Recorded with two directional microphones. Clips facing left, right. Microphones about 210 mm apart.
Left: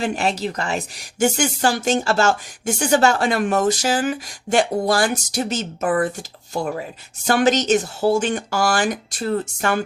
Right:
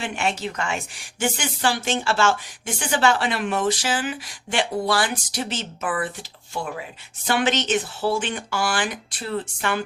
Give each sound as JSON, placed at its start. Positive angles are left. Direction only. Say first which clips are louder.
{"t": 0.0, "sound": "speech", "louder": "left 4 dB", "side_deg": 40}